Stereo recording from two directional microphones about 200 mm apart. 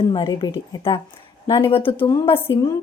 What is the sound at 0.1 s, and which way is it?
A woman's voice, 20° left (ahead or behind).